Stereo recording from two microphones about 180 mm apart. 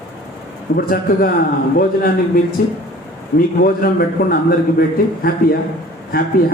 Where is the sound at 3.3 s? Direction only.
55° left (ahead or behind).